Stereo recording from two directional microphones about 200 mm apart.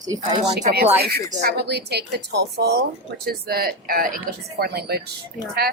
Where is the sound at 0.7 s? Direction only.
50° right (ahead or behind).